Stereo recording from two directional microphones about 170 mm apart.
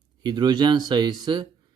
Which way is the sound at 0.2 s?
25° right (ahead or behind).